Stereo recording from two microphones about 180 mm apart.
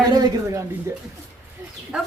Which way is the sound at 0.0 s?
20° right (ahead or behind).